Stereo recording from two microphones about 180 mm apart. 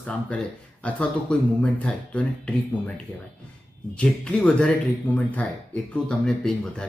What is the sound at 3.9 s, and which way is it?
Speech, 5° left (ahead or behind).